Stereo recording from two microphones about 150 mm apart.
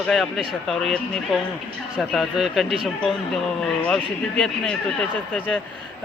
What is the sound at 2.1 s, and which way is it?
Speech, centre (ahead or behind).